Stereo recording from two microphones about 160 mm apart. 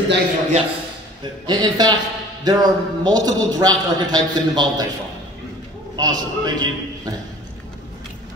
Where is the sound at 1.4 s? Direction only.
25° right (ahead or behind).